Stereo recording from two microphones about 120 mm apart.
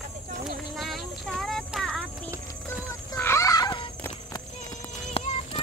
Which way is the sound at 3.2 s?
20° left (ahead or behind).